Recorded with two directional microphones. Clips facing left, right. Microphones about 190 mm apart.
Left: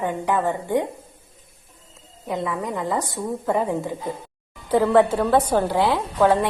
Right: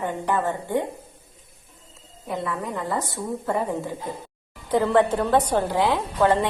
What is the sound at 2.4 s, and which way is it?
Speech, 15° left (ahead or behind).